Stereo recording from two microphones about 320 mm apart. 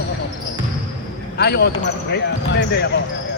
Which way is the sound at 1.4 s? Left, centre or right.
Left.